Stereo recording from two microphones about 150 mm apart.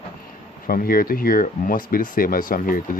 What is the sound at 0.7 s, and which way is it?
Speech, 75° left (ahead or behind).